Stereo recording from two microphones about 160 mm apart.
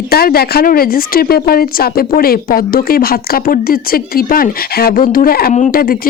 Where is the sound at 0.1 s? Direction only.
70° left (ahead or behind).